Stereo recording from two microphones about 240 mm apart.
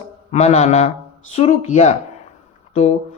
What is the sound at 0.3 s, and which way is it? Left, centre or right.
Speech, left.